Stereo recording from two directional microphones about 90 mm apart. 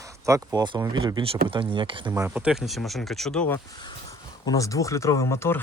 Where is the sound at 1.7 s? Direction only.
70° right (ahead or behind).